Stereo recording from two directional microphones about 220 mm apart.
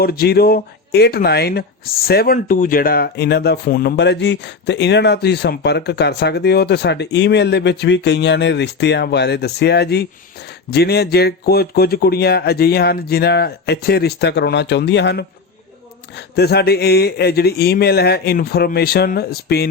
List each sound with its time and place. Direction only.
0.0 s speech: 45° left (ahead or behind)